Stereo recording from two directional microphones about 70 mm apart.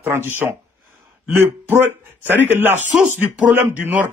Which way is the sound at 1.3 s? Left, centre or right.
Right.